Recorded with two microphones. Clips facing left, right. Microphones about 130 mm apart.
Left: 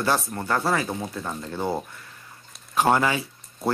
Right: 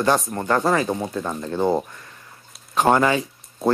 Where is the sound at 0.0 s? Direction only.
20° right (ahead or behind).